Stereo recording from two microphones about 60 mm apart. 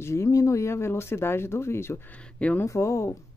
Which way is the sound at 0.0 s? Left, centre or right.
Left.